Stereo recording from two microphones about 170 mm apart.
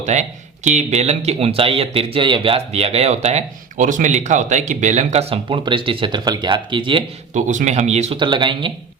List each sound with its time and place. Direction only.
0.0 s speech: 45° right (ahead or behind); by 7.0 s 30° right (ahead or behind)
7.3 s speech: 45° right (ahead or behind)
8.2 s speech: 30° right (ahead or behind)